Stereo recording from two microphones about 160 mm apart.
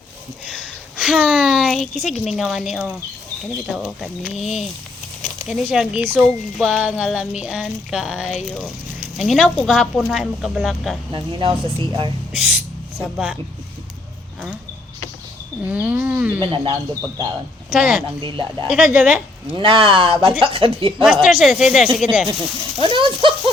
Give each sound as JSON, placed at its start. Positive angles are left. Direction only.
{"t": 0.5, "sound": "a sound", "side_deg": -5}
{"t": 2.0, "sound": "speech", "side_deg": 0}
{"t": 4.0, "sound": "speech", "side_deg": 0}
{"t": 11.1, "sound": "speech", "side_deg": -30}
{"t": 12.3, "sound": "a sound", "side_deg": -5}
{"t": 15.6, "sound": "speech", "side_deg": -10}
{"t": 16.4, "sound": "speech", "side_deg": -35}
{"t": 17.7, "sound": "speech", "side_deg": -5}
{"t": 18.2, "sound": "speech", "side_deg": -30}
{"t": 18.7, "sound": "speech", "side_deg": -5}
{"t": 19.5, "sound": "speech", "side_deg": -30}
{"t": 21.0, "sound": "speech", "side_deg": 0}
{"t": 22.8, "sound": "a sound", "side_deg": -30}